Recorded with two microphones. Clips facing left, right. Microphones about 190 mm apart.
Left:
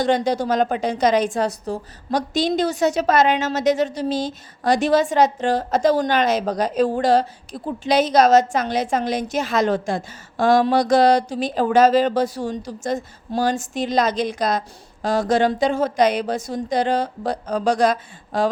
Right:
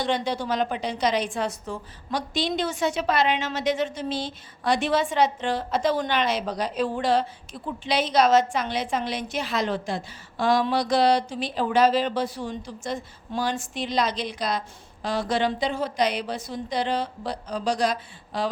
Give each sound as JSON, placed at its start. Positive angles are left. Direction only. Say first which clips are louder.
{"t": 0.0, "sound": "a woman's voice", "louder": "left 7 dB", "side_deg": 40}